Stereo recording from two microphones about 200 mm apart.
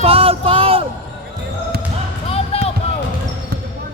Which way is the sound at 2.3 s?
30° left (ahead or behind).